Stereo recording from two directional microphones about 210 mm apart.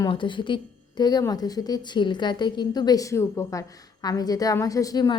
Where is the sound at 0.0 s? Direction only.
25° left (ahead or behind).